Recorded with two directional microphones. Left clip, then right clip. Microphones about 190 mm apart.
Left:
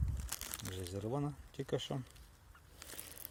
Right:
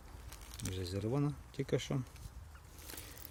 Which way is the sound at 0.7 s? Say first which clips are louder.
Right 3 dB; centre (ahead or behind).